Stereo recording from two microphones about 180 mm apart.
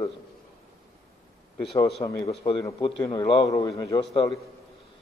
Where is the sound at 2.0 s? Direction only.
30° left (ahead or behind).